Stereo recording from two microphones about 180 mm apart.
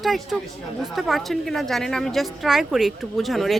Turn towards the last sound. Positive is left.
turn(degrees=0)  # may be behind; listen again after turning